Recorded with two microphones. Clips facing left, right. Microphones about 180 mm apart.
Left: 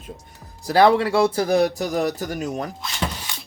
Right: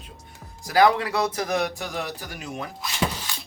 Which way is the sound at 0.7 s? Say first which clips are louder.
Left 4 dB; 30° left (ahead or behind).